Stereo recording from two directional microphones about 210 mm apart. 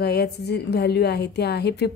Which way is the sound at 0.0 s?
50° left (ahead or behind).